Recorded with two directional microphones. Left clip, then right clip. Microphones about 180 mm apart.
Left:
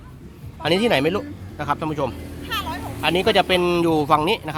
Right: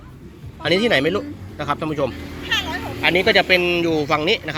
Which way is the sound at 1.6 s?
10° left (ahead or behind).